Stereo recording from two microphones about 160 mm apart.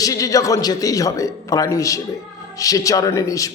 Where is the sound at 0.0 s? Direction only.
20° left (ahead or behind).